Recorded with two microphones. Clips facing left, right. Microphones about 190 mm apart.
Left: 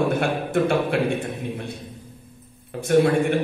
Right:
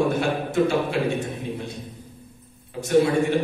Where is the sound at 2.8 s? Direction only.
55° left (ahead or behind).